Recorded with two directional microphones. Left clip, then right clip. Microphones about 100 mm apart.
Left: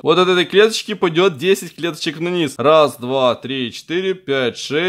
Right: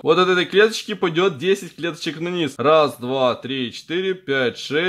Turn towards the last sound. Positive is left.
turn(degrees=35)  # may be behind; listen again after turning